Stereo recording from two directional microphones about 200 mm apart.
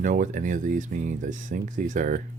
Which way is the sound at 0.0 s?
40° right (ahead or behind).